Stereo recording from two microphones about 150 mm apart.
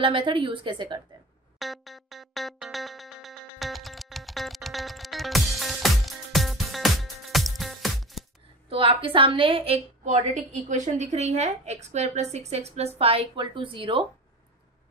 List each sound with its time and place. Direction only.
0.0 s a woman's voice: 35° right (ahead or behind)
1.6 s music: centre (ahead or behind)
8.6 s a woman's voice: 35° right (ahead or behind)
10.0 s a woman's voice: 50° right (ahead or behind); by 14.0 s 35° right (ahead or behind)